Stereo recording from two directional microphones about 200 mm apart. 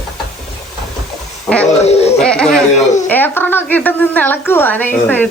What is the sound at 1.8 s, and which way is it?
Speech, 30° left (ahead or behind).